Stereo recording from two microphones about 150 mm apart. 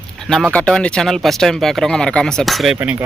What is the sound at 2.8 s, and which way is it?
Speech, 10° right (ahead or behind).